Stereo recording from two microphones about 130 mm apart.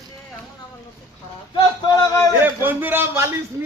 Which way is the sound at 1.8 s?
30° left (ahead or behind).